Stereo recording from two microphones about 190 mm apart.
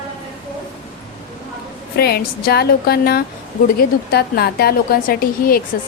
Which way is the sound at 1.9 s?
55° left (ahead or behind).